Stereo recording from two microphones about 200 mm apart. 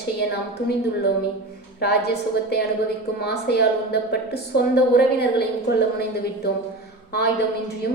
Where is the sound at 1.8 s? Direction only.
55° left (ahead or behind).